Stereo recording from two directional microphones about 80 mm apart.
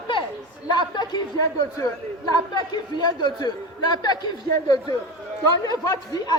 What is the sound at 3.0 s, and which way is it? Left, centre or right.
Speech, left.